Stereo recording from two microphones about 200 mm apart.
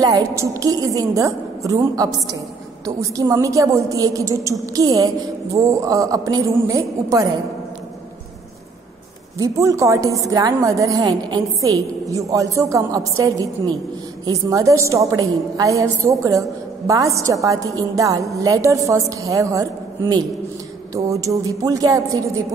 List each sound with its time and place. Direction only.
0.0 s a woman's voice: 15° right (ahead or behind)
9.4 s a woman's voice: 15° right (ahead or behind)